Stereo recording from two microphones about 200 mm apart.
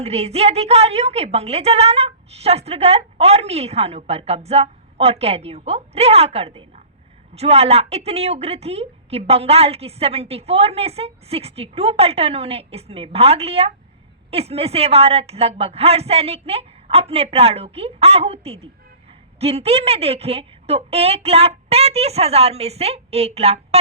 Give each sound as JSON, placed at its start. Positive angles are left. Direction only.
{"t": 0.0, "sound": "a woman's voice", "side_deg": -30}